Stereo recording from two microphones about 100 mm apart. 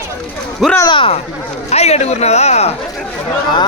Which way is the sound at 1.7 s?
90° left.